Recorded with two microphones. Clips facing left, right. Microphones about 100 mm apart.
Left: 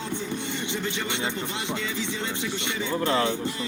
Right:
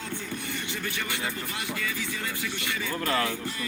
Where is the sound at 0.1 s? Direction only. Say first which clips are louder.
Left 4 dB; 20° left (ahead or behind).